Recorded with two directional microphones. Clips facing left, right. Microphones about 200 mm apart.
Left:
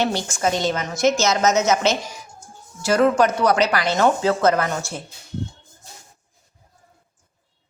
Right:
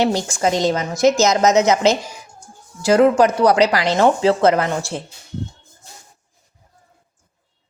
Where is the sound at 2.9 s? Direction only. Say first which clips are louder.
Right 4 dB; 25° right (ahead or behind).